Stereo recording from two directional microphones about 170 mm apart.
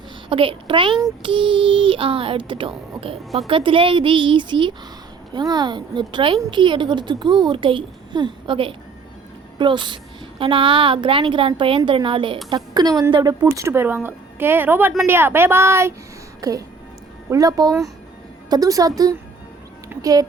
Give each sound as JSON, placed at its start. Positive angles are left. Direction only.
{"t": 0.3, "sound": "a child's voice", "side_deg": -30}